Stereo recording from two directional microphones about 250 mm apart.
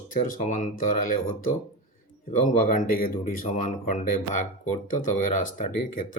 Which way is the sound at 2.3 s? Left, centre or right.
Left.